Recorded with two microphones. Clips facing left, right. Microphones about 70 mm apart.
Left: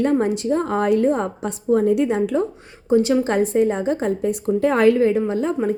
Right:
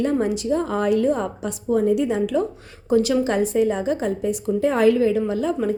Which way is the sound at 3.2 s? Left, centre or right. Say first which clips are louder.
Left 2 dB; left.